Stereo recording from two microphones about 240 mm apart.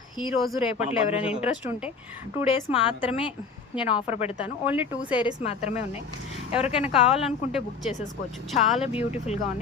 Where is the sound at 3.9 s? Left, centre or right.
Left.